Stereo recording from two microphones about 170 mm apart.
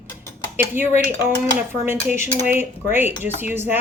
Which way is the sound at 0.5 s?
10° right (ahead or behind).